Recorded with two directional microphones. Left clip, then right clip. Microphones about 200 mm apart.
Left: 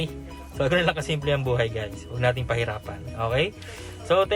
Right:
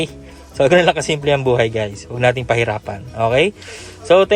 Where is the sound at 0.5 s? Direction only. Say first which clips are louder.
Right 10 dB; 25° right (ahead or behind).